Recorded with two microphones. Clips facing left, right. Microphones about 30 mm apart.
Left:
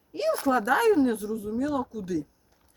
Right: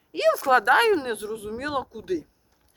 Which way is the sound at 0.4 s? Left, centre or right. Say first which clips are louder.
Right 3 dB; right.